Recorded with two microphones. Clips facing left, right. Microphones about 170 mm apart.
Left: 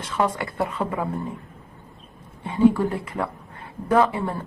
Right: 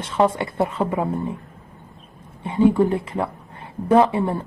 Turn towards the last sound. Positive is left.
turn(degrees=-25)  # may be behind; listen again after turning